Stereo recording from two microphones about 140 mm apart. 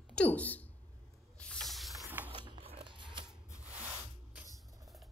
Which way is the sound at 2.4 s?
30° right (ahead or behind).